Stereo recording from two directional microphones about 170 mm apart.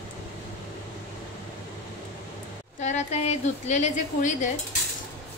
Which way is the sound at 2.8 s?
45° left (ahead or behind).